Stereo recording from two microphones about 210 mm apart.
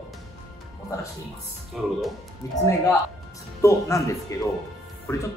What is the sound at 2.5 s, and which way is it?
Speech, 15° left (ahead or behind).